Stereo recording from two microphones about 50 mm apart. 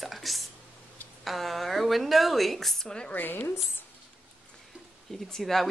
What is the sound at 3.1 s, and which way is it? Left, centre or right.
Speech, left.